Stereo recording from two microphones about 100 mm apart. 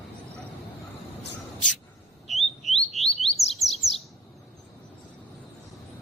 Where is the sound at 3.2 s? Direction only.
90° left.